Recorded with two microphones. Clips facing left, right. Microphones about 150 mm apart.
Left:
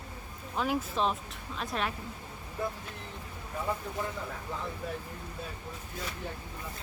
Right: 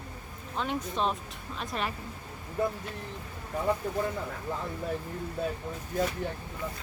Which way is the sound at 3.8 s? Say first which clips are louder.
Right 7 dB; 50° right (ahead or behind).